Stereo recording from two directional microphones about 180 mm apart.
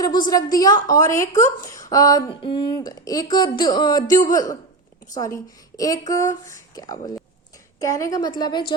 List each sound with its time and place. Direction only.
0.0 s a woman's voice: 20° left (ahead or behind)